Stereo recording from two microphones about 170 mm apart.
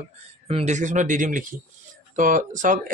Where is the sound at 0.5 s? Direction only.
40° right (ahead or behind).